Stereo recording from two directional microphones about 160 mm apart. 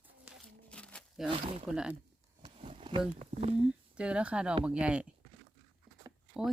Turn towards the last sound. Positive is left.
turn(degrees=-5)  # may be behind; listen again after turning